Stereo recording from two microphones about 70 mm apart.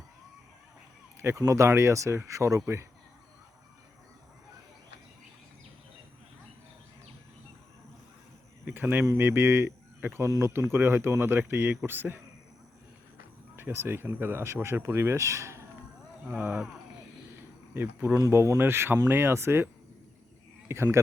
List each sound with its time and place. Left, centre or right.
1.2 s speech: right
8.6 s a sound: right
9.1 s speech: right
13.6 s speech: right
16.2 s speech: right
17.7 s speech: right
18.6 s speech: right